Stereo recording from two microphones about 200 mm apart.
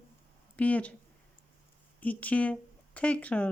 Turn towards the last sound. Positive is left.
turn(degrees=5)  # may be behind; listen again after turning